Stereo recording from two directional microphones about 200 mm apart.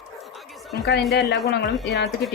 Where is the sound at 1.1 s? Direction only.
55° left (ahead or behind).